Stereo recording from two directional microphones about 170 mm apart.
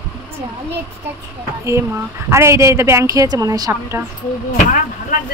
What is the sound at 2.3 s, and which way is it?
Speech, 15° right (ahead or behind).